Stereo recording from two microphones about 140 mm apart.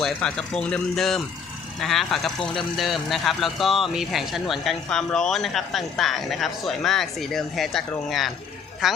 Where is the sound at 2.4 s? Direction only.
35° left (ahead or behind).